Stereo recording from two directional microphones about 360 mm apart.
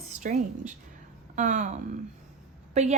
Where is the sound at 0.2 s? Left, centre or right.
Right.